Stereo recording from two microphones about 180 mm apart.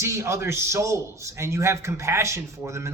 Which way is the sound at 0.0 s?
15° right (ahead or behind).